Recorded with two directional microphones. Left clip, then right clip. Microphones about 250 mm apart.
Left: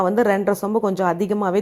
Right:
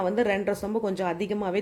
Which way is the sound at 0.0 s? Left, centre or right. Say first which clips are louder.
Left 7 dB; centre.